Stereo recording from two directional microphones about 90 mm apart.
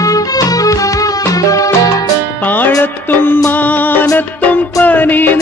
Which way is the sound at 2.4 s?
20° left (ahead or behind).